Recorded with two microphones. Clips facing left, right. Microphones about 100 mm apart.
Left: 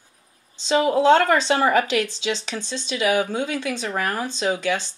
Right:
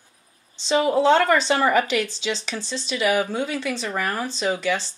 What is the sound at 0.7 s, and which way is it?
Speech, 15° left (ahead or behind).